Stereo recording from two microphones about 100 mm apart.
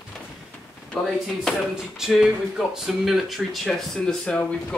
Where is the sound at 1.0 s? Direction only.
5° left (ahead or behind).